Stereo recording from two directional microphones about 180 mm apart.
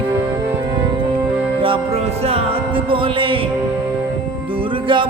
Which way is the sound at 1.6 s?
30° right (ahead or behind).